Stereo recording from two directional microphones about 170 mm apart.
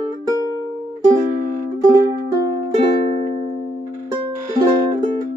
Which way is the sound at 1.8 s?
20° right (ahead or behind).